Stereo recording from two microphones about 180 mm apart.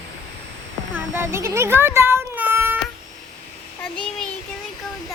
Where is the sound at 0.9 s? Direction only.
10° right (ahead or behind).